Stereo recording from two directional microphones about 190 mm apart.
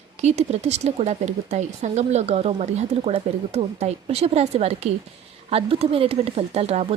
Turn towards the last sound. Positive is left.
turn(degrees=-35)  # may be behind; listen again after turning